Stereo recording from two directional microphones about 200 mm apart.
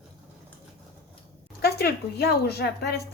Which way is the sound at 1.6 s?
50° left (ahead or behind).